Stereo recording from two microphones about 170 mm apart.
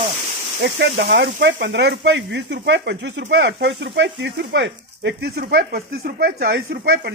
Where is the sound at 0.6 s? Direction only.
90° right.